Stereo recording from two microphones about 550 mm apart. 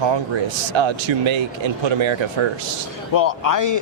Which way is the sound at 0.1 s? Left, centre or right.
Right.